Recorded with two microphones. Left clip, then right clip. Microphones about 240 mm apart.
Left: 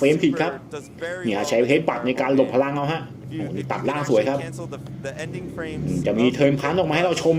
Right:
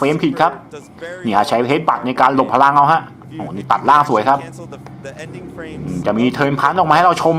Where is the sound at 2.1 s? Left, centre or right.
Right.